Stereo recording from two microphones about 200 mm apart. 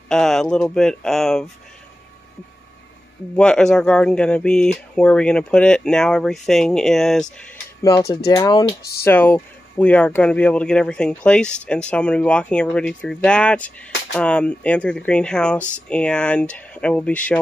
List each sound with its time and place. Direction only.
0.1 s speech: centre (ahead or behind)
3.3 s speech: 5° left (ahead or behind)
8.3 s speech: 20° left (ahead or behind)